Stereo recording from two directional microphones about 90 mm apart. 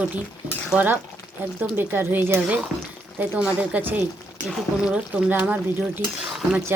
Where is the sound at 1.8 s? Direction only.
20° right (ahead or behind).